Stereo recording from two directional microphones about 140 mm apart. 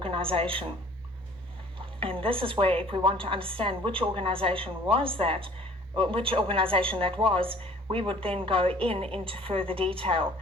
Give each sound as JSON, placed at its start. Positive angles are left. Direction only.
{"t": 0.0, "sound": "a woman's voice", "side_deg": -40}
{"t": 2.0, "sound": "a woman's voice", "side_deg": -40}